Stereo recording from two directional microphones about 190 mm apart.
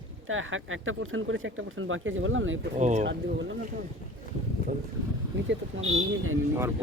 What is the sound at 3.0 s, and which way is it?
Speech, 70° right (ahead or behind).